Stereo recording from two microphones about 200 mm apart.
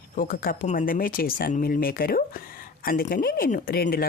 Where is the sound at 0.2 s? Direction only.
45° left (ahead or behind).